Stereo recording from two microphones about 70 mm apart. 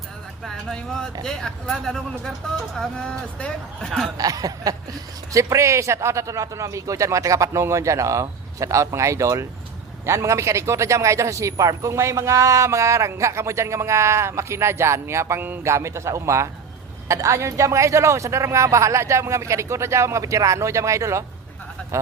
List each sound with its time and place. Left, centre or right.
0.4 s speech: centre
4.2 s a sound: right
5.3 s a man's voice: right